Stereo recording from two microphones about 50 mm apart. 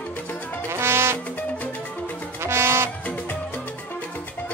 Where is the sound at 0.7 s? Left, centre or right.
Right.